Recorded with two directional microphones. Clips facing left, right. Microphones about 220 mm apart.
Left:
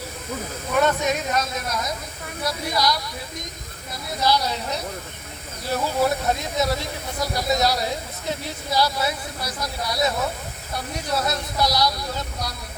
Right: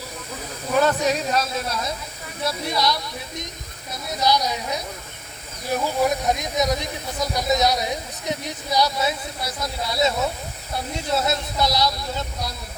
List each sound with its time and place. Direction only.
0.8 s speech: 35° right (ahead or behind)
4.2 s a woman's voice: 15° right (ahead or behind)